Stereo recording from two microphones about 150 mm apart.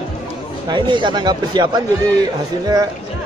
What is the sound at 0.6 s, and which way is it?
Speech, 30° right (ahead or behind).